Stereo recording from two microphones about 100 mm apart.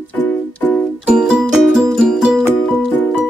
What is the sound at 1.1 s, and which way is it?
Music, 5° right (ahead or behind).